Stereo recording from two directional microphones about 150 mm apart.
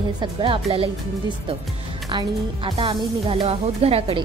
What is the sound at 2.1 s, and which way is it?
Speech, 35° right (ahead or behind).